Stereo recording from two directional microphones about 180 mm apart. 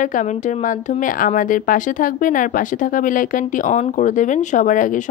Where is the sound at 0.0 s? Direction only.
45° left (ahead or behind).